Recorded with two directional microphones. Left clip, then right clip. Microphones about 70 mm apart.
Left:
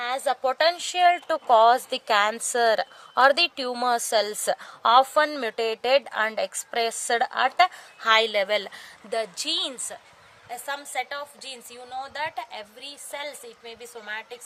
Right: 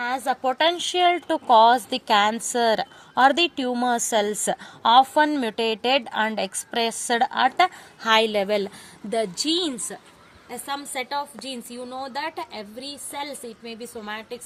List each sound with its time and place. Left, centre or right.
0.0 s a woman's voice: left
4.0 s a woman's voice: left
8.0 s a woman's voice: left